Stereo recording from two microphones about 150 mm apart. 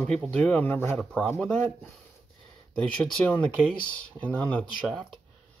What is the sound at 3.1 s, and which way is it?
Speech, 10° left (ahead or behind).